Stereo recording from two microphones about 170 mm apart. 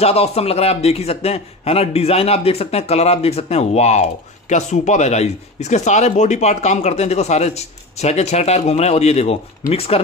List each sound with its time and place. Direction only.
0.0 s a man's voice: 35° left (ahead or behind)